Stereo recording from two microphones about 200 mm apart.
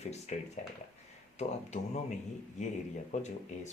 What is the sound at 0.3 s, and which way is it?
Speech, 35° left (ahead or behind).